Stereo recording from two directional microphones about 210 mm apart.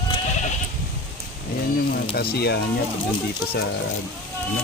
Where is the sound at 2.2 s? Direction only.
50° left (ahead or behind).